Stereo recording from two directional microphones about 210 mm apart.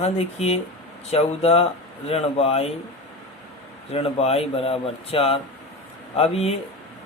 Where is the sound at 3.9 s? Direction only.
30° left (ahead or behind).